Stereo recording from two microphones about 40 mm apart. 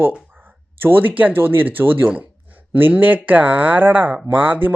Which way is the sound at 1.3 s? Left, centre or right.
Right.